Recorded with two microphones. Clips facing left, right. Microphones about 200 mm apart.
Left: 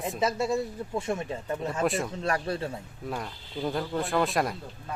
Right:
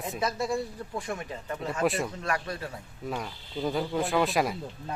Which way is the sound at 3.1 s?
Centre (ahead or behind).